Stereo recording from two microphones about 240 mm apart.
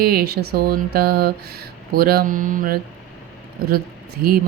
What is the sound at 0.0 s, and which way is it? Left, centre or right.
Speech, right.